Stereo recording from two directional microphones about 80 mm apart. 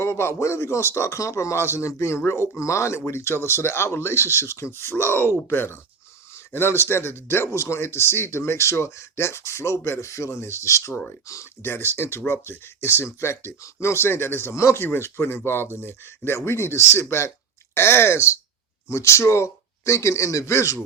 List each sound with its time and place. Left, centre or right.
0.0 s speech: left